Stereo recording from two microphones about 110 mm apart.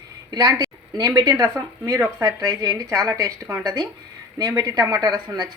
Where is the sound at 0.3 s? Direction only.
35° right (ahead or behind).